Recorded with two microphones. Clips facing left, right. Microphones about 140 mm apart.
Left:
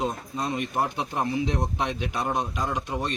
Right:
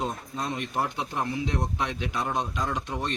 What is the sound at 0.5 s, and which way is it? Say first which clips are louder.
Speech: left 2 dB; 15° left (ahead or behind).